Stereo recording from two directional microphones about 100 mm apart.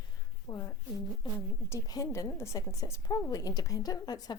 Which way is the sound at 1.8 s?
35° left (ahead or behind).